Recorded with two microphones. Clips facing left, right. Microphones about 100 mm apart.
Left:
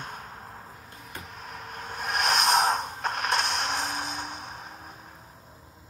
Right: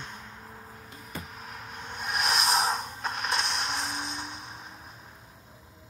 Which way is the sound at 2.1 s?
Centre (ahead or behind).